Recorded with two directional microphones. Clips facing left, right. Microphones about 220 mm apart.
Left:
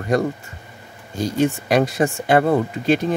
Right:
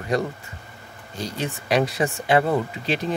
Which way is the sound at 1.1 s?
45° left (ahead or behind).